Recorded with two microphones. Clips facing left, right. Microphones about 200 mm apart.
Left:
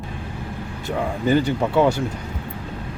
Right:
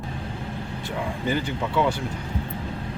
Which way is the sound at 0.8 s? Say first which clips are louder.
Left 6 dB; 40° left (ahead or behind).